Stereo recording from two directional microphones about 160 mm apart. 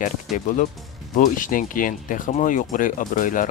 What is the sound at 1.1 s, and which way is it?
Speech, 55° left (ahead or behind).